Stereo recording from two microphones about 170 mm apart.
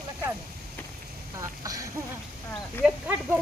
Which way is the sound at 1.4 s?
20° right (ahead or behind).